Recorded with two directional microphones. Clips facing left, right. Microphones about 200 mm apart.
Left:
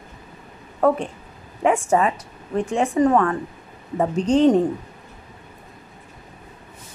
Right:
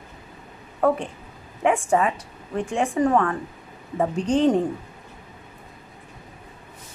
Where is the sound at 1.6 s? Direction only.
40° left (ahead or behind).